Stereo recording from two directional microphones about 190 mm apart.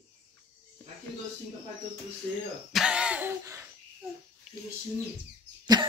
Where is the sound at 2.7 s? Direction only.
5° right (ahead or behind).